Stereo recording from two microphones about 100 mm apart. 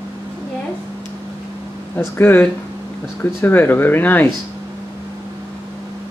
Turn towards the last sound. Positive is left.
turn(degrees=20)  # may be behind; listen again after turning